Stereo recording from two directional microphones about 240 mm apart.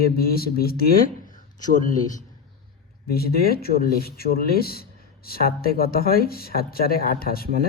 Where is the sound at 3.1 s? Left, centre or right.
Left.